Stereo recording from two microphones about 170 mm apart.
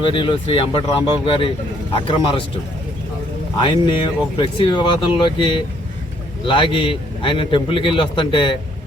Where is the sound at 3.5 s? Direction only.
25° left (ahead or behind).